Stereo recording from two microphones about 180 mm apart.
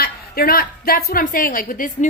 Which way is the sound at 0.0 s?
55° left (ahead or behind).